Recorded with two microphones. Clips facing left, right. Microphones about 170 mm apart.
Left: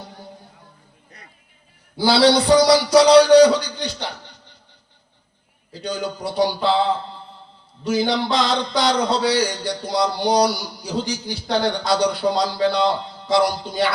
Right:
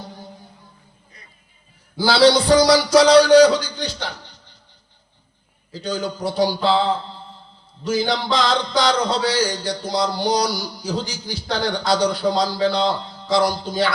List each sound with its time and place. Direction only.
2.0 s speech: 60° left (ahead or behind)
5.7 s speech: 65° left (ahead or behind)